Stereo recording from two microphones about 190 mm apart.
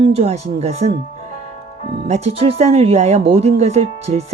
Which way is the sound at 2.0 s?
35° right (ahead or behind).